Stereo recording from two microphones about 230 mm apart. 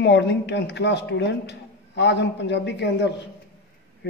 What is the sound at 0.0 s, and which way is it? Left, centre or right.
A woman's voice, left.